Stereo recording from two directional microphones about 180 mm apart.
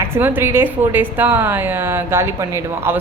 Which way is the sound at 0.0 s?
10° right (ahead or behind).